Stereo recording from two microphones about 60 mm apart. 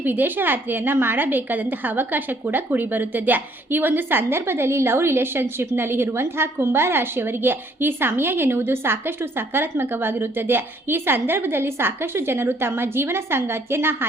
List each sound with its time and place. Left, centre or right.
0.0 s a woman's voice: right